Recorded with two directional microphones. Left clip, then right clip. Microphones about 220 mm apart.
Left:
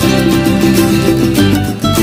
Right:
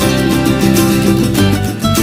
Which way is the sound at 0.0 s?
Centre (ahead or behind).